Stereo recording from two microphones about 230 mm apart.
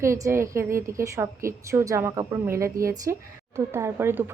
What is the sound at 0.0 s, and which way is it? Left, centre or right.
A woman's voice, centre.